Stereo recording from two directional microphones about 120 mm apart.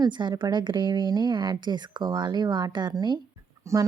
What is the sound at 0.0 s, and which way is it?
Speech, 40° right (ahead or behind).